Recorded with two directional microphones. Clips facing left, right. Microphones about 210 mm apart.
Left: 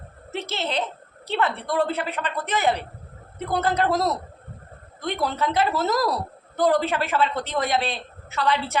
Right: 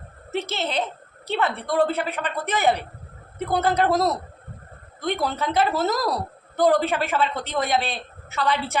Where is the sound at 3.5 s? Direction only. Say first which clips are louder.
Right 2 dB; centre (ahead or behind).